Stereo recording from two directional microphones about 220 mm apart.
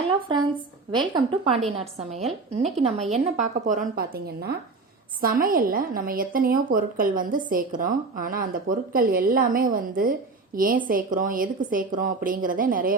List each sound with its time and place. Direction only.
0.9 s a woman's voice: 20° right (ahead or behind); by 12.9 s 40° right (ahead or behind)